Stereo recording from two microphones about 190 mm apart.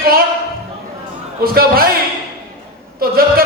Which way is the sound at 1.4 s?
50° right (ahead or behind).